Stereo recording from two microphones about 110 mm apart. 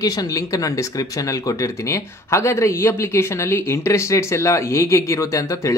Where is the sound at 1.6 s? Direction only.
25° left (ahead or behind).